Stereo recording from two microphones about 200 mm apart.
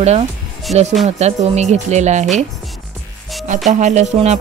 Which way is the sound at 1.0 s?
35° right (ahead or behind).